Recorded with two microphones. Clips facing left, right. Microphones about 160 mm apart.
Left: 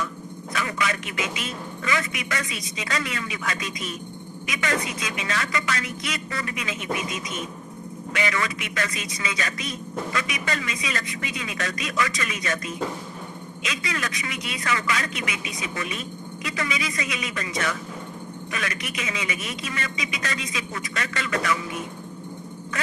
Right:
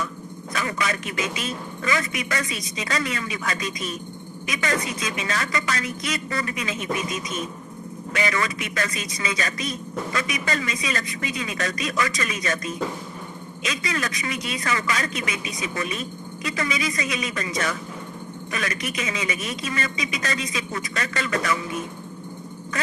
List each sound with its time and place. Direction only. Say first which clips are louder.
0.5 s a man's voice: right 1 dB; 35° right (ahead or behind)
8.1 s a man's voice: right 1 dB; 35° right (ahead or behind)